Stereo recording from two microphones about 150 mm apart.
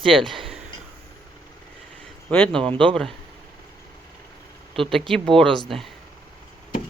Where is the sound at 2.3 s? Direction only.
10° left (ahead or behind).